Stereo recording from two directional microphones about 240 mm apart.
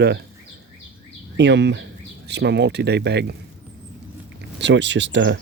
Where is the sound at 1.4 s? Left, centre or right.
Right.